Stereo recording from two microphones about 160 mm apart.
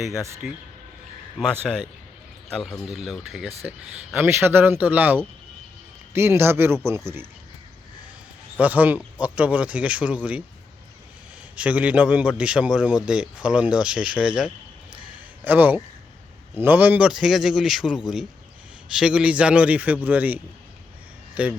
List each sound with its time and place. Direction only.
0.4 s a man's voice: 5° right (ahead or behind)
8.5 s a man's voice: 10° right (ahead or behind)
11.5 s a man's voice: 10° right (ahead or behind)